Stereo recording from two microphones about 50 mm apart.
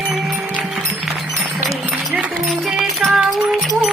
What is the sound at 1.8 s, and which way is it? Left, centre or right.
Music, right.